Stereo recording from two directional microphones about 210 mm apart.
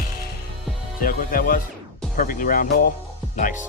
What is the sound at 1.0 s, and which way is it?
Speech, 40° left (ahead or behind).